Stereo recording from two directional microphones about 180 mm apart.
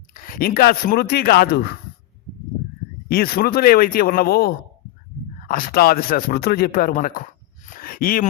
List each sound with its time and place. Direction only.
0.1 s speech: 55° left (ahead or behind)
3.1 s a man's voice: 55° left (ahead or behind)
7.8 s a sound: 55° left (ahead or behind)